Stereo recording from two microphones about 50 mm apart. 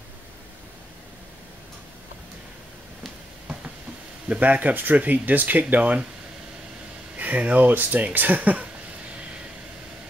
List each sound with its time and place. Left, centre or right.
4.3 s speech: right
7.2 s speech: right